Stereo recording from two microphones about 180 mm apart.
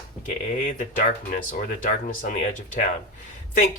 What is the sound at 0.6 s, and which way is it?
Speech, 45° left (ahead or behind).